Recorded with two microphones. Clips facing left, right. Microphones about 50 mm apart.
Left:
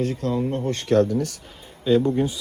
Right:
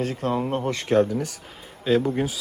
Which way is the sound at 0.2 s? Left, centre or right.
Right.